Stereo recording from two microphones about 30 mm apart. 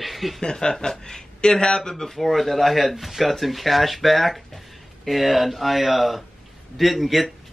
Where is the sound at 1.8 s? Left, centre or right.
Centre.